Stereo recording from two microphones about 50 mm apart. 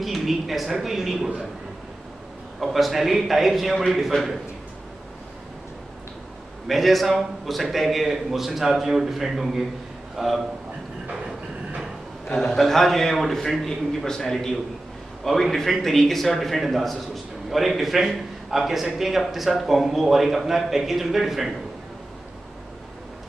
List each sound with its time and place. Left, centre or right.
0.0 s a man's voice: centre
2.6 s a man's voice: centre
6.7 s a man's voice: centre
12.3 s a man's voice: centre